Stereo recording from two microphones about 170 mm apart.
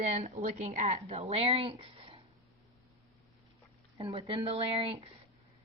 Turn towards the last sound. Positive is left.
turn(degrees=-30)  # may be behind; listen again after turning